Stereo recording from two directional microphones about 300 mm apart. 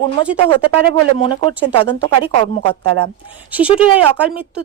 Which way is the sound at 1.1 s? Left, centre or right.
Centre.